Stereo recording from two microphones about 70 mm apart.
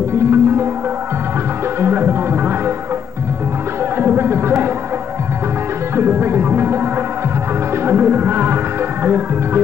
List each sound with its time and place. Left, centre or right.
0.1 s music: right
1.8 s music: right
4.0 s music: right
5.9 s music: right